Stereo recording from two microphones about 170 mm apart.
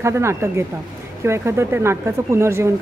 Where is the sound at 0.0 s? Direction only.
15° right (ahead or behind).